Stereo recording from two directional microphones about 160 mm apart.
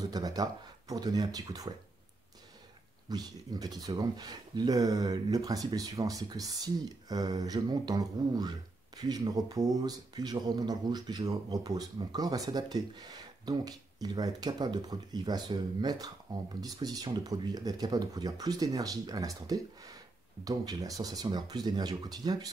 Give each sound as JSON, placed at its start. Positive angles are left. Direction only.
{"t": 0.1, "sound": "speech", "side_deg": -25}
{"t": 3.1, "sound": "speech", "side_deg": -25}